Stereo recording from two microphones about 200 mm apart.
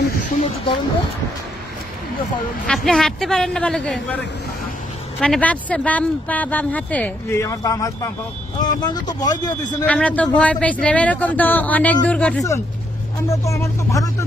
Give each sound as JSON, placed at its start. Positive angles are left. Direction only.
{"t": 2.6, "sound": "speech", "side_deg": 5}
{"t": 9.8, "sound": "speech", "side_deg": 5}